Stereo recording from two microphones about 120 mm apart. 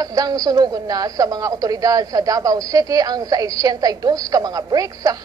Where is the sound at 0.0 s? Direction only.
30° right (ahead or behind).